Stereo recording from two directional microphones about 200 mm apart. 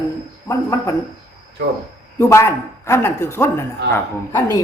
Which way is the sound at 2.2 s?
15° left (ahead or behind).